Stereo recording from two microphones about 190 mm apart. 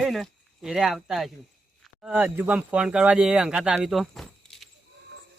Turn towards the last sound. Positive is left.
turn(degrees=0)  # may be behind; listen again after turning